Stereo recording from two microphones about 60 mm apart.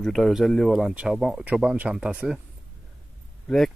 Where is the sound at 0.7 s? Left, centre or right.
Centre.